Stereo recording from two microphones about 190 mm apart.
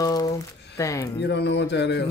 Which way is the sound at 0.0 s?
20° left (ahead or behind).